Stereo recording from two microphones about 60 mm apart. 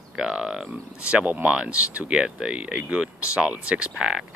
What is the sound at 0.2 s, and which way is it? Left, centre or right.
Speech, centre.